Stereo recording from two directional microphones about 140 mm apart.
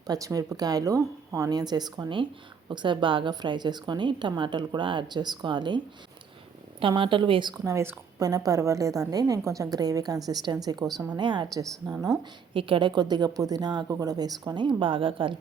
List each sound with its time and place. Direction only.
0.1 s a woman's voice: 25° right (ahead or behind)
7.6 s a woman's voice: 20° right (ahead or behind); by 15.4 s 40° right (ahead or behind)